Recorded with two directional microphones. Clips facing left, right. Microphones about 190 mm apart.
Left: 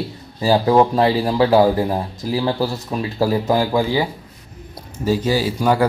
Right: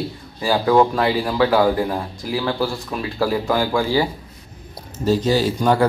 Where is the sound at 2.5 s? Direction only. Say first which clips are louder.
Left 2 dB; 20° left (ahead or behind).